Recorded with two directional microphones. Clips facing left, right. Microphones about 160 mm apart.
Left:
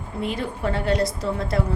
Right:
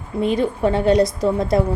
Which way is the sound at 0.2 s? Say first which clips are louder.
Right 8 dB; 20° right (ahead or behind).